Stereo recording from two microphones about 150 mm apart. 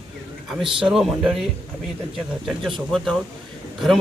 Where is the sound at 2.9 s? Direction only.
Centre (ahead or behind).